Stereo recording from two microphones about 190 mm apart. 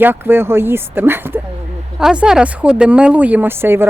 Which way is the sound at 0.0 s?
10° right (ahead or behind).